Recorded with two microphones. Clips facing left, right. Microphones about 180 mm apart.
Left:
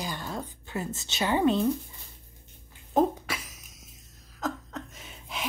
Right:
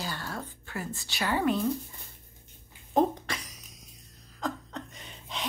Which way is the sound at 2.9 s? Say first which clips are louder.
Left 1 dB; 5° left (ahead or behind).